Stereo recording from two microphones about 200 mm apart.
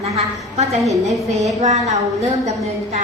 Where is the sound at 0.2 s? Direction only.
35° right (ahead or behind).